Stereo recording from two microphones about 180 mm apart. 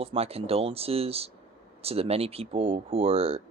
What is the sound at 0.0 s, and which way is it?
Speech, 35° right (ahead or behind).